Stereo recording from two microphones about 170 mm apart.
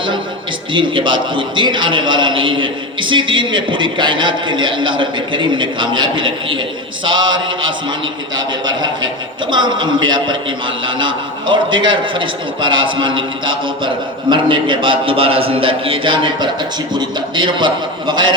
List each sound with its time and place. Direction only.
0.7 s a man's voice: 30° right (ahead or behind)
9.5 s a man's voice: 25° right (ahead or behind)